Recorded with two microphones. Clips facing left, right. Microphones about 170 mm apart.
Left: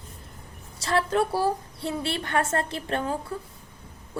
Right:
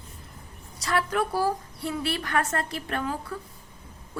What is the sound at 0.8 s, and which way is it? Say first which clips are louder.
A woman's voice: left 2 dB; 25° left (ahead or behind).